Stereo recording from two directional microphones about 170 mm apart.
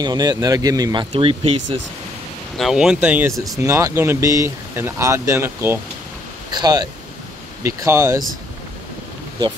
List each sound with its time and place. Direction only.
0.0 s speech: 25° right (ahead or behind)
1.1 s speech: 35° right (ahead or behind)
2.5 s speech: centre (ahead or behind)